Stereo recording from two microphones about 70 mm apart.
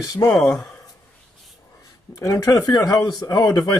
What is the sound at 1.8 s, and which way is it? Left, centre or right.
Speech, left.